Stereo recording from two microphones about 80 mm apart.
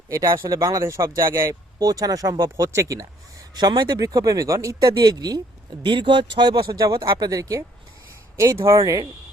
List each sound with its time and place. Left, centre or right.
0.1 s a man's voice: right
5.8 s a man's voice: right